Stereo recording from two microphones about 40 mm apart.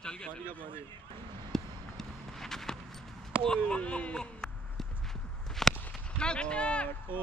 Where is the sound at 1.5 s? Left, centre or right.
Centre.